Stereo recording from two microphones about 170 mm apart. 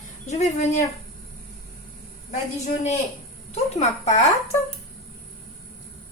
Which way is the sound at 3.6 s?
40° left (ahead or behind).